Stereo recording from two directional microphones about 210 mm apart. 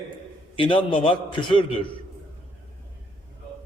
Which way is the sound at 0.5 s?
25° left (ahead or behind).